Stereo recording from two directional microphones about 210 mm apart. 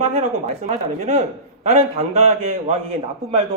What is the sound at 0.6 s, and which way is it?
A man's voice, 35° right (ahead or behind).